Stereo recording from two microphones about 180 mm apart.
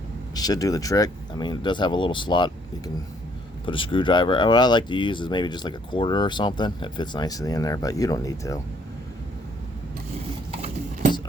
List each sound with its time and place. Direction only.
0.3 s speech: 20° left (ahead or behind)